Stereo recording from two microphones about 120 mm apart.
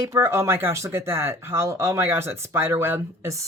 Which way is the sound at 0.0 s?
20° right (ahead or behind).